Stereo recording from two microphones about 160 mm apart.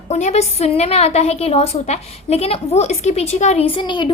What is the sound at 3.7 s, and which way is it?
Speech, 30° left (ahead or behind).